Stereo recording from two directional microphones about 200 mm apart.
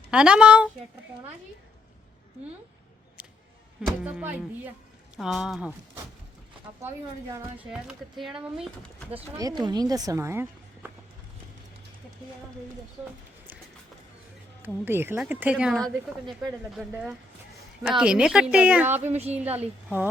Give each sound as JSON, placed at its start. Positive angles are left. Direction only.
{"t": 0.1, "sound": "speech", "side_deg": -5}
{"t": 3.2, "sound": "a sound", "side_deg": -5}
{"t": 3.8, "sound": "speech", "side_deg": -5}
{"t": 6.8, "sound": "speech", "side_deg": -15}
{"t": 7.6, "sound": "speech", "side_deg": -5}
{"t": 14.6, "sound": "speech", "side_deg": -10}
{"t": 18.9, "sound": "speech", "side_deg": -35}
{"t": 19.4, "sound": "speech", "side_deg": -5}